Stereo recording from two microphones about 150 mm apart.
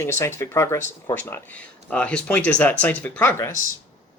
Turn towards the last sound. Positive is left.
turn(degrees=15)  # may be behind; listen again after turning